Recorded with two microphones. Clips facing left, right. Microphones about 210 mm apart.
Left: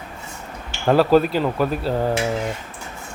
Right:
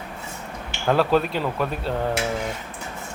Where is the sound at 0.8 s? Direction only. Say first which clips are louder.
Left 5 dB; centre (ahead or behind).